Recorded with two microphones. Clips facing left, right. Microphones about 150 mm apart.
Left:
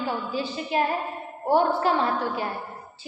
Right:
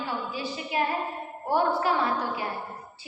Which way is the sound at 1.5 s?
25° left (ahead or behind).